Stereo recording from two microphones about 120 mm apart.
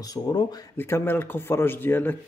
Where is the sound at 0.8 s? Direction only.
20° left (ahead or behind).